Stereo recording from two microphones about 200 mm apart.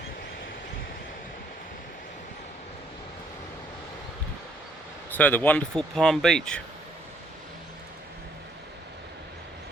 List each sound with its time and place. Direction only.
5.1 s speech: 10° left (ahead or behind)